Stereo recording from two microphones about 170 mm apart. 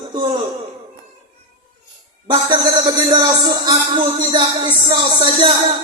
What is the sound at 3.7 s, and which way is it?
Music, 25° right (ahead or behind).